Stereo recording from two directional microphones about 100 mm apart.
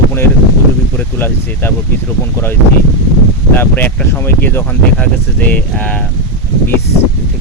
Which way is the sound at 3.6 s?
20° left (ahead or behind).